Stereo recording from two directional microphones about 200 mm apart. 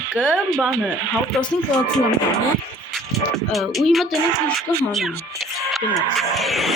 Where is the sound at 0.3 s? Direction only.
5° left (ahead or behind).